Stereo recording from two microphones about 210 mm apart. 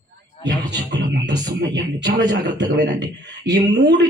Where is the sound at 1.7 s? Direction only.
55° right (ahead or behind).